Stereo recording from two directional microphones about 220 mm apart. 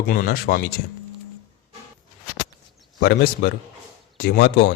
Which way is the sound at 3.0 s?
45° left (ahead or behind).